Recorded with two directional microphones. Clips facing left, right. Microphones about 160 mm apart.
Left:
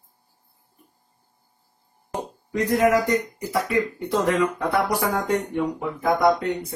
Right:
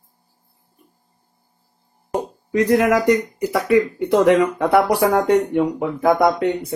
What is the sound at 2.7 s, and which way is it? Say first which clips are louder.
Speech: right 3 dB; 90° right.